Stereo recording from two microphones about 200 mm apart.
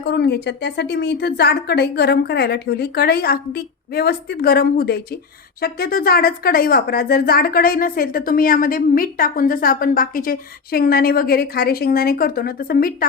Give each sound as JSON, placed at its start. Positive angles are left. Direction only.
{"t": 0.0, "sound": "speech", "side_deg": 55}